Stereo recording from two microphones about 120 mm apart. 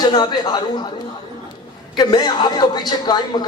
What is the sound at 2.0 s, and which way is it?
Speech, 35° left (ahead or behind).